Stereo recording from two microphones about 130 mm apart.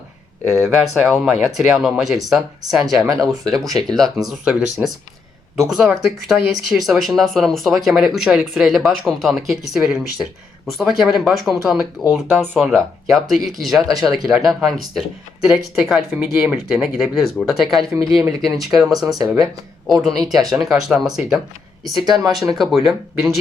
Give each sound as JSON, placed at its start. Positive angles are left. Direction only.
{"t": 0.6, "sound": "speech", "side_deg": 0}
{"t": 3.1, "sound": "speech", "side_deg": -25}
{"t": 3.5, "sound": "speech", "side_deg": 0}
{"t": 13.8, "sound": "speech", "side_deg": -30}
{"t": 14.1, "sound": "speech", "side_deg": 0}
{"t": 18.1, "sound": "speech", "side_deg": -25}
{"t": 18.7, "sound": "speech", "side_deg": 0}
{"t": 18.9, "sound": "speech", "side_deg": -30}
{"t": 19.9, "sound": "speech", "side_deg": 0}
{"t": 22.5, "sound": "speech", "side_deg": 0}